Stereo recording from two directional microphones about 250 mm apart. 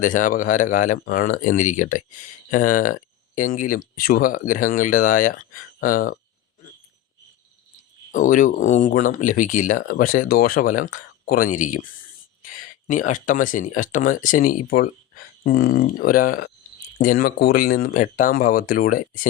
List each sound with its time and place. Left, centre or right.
0.0 s speech: left
8.1 s speech: left